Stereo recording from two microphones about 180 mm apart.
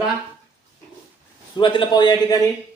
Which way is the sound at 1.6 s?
25° left (ahead or behind).